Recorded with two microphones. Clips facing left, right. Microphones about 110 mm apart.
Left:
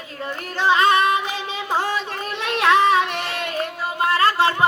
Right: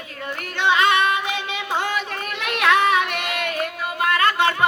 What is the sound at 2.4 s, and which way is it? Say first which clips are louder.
Child singing: left 2 dB; 30° left (ahead or behind).